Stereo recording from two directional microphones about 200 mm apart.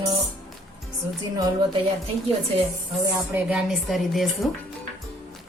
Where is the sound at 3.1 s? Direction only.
5° right (ahead or behind).